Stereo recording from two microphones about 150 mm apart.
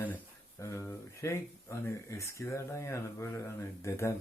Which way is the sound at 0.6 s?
20° left (ahead or behind).